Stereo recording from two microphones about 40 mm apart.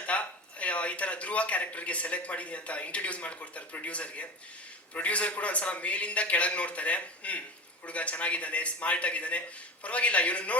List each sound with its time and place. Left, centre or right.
0.0 s a man's voice: left